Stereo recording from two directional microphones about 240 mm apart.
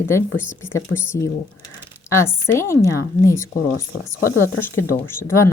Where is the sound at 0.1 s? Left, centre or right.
Centre.